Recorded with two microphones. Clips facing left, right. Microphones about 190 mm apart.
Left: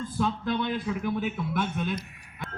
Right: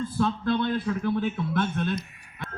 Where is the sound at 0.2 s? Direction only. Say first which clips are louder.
Right 3 dB; 15° left (ahead or behind).